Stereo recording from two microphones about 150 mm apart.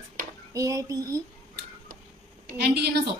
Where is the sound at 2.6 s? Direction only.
90° right.